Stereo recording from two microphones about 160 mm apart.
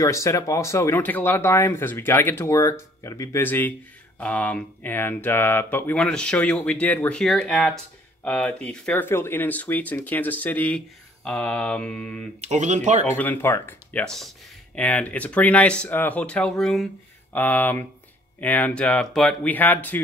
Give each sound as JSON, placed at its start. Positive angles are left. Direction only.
{"t": 0.0, "sound": "speech", "side_deg": 20}
{"t": 12.4, "sound": "speech", "side_deg": -45}
{"t": 13.0, "sound": "speech", "side_deg": 10}